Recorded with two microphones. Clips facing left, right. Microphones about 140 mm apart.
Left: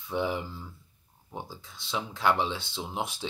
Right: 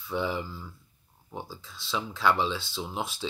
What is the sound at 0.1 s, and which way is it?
Speech, 20° left (ahead or behind).